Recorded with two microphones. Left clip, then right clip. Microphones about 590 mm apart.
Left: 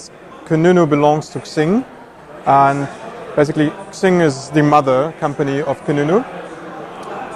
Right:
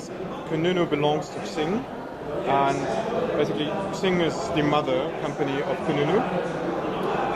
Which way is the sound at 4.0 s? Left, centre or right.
Left.